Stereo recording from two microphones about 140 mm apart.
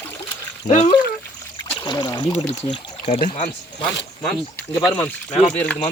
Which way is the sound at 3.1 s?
60° left (ahead or behind).